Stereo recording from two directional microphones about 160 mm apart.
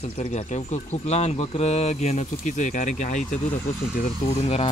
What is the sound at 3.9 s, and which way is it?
Speech, 60° left (ahead or behind).